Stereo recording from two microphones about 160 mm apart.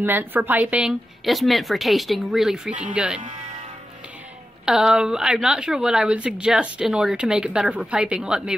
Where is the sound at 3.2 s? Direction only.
45° right (ahead or behind).